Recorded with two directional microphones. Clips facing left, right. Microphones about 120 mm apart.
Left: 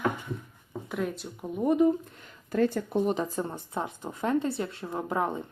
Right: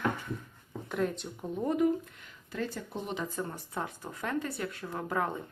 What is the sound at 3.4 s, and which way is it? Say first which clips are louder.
Speech: left 3 dB; 20° left (ahead or behind).